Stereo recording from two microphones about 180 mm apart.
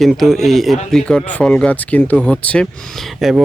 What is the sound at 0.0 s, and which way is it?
Speech, centre (ahead or behind).